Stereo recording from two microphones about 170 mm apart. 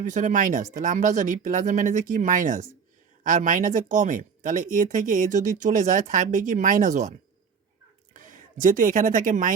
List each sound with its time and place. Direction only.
0.0 s speech: 45° right (ahead or behind)
8.1 s speech: 50° right (ahead or behind)